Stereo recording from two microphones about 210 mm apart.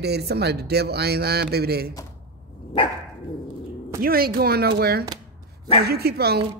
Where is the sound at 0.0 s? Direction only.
50° right (ahead or behind).